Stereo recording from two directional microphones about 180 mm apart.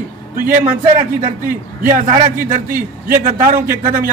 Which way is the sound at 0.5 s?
45° right (ahead or behind).